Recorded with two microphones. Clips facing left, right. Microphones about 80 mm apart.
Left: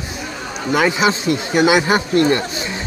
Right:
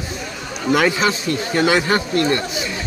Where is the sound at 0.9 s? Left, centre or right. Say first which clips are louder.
Left 2 dB; centre.